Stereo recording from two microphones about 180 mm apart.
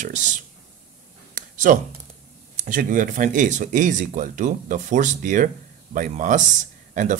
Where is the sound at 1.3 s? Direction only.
45° right (ahead or behind).